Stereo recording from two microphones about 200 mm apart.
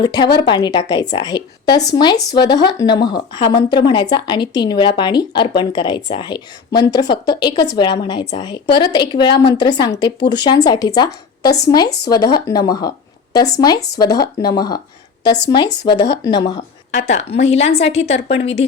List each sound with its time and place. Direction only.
0.0 s a woman's voice: 20° left (ahead or behind)
17.0 s a woman's voice: 35° left (ahead or behind)